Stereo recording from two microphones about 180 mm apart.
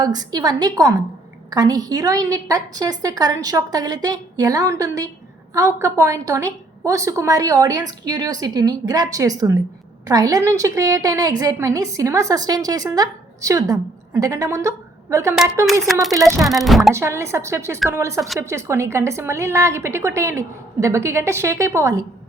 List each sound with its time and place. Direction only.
0.0 s a woman's voice: 20° right (ahead or behind)
15.9 s speech: centre (ahead or behind)
16.1 s a woman's voice: 15° right (ahead or behind)
16.4 s speech: centre (ahead or behind)
16.9 s a woman's voice: 15° right (ahead or behind)